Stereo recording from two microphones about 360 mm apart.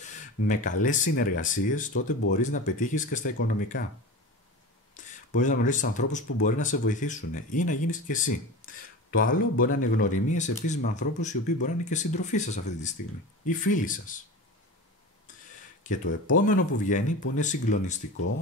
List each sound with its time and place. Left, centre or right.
0.0 s speech: centre
4.9 s speech: left
15.8 s speech: left